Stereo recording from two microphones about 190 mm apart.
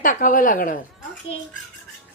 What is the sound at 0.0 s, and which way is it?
Speech, 45° left (ahead or behind).